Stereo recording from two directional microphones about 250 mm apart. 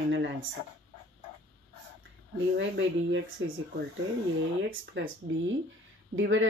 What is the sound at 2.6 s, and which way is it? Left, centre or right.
Speech, right.